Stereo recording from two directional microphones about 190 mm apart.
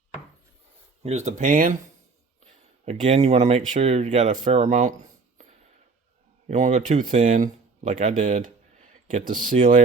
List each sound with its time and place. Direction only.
1.0 s speech: 35° right (ahead or behind)
2.8 s speech: 40° right (ahead or behind)
6.5 s speech: 40° right (ahead or behind)